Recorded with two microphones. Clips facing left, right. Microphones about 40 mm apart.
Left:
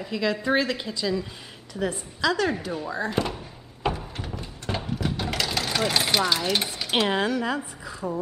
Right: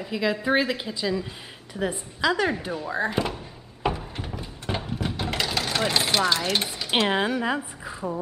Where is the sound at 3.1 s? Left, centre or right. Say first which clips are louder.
Even; centre.